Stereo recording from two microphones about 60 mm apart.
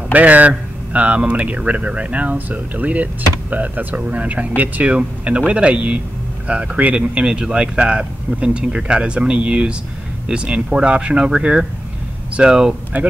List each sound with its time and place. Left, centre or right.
0.1 s speech: right
12.9 s speech: right